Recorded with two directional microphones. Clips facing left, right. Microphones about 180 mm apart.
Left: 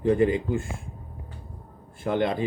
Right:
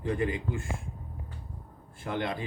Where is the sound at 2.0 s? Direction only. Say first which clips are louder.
Left 8 dB; 25° left (ahead or behind).